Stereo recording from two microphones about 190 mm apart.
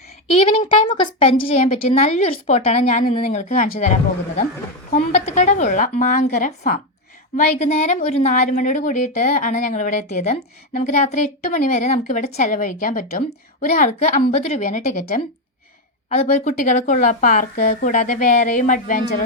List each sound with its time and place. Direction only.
0.3 s a woman's voice: 30° left (ahead or behind)
3.2 s a woman's voice: 45° left (ahead or behind)
16.2 s a woman's voice: 40° left (ahead or behind)